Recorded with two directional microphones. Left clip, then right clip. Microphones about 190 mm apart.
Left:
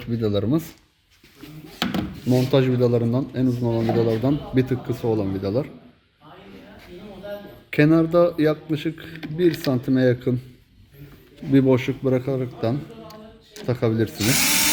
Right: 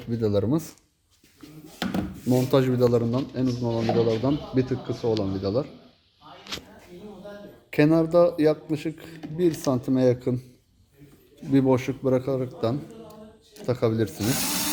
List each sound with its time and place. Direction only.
0.1 s speech: 5° right (ahead or behind)
1.8 s wood: 10° right (ahead or behind)
2.2 s speech: 15° left (ahead or behind)
2.5 s speech: centre (ahead or behind)
3.1 s speech: 15° left (ahead or behind)
7.7 s speech: centre (ahead or behind)
11.5 s speech: 5° left (ahead or behind)